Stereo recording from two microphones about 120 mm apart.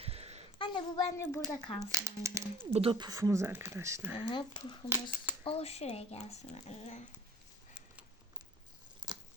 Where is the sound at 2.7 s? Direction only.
55° right (ahead or behind).